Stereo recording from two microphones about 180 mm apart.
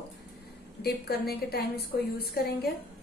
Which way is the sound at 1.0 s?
60° left (ahead or behind).